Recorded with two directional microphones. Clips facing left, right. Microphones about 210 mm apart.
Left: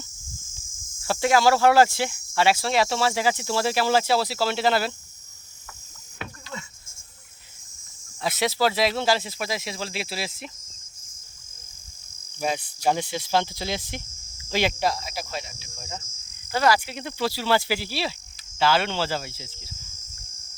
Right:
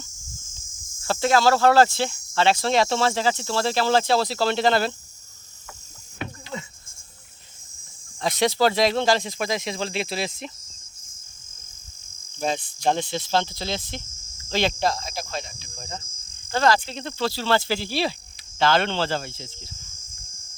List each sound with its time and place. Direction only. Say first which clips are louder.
1.0 s speech: even; 10° left (ahead or behind)
8.2 s speech: right 3 dB; 5° left (ahead or behind)
12.4 s speech: right 1 dB; 10° left (ahead or behind)